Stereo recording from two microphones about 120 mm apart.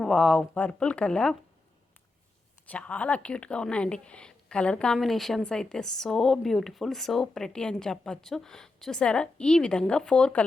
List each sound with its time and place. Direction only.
0.0 s speech: centre (ahead or behind)
0.5 s speech: 10° left (ahead or behind)
2.6 s speech: 10° left (ahead or behind)